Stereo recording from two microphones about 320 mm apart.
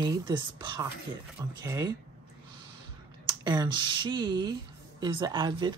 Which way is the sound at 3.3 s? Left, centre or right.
Centre.